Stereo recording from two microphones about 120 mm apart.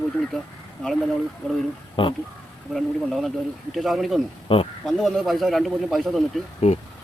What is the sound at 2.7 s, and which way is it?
Speech, centre (ahead or behind).